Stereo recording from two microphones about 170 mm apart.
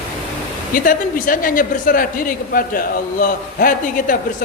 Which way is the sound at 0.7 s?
55° left (ahead or behind).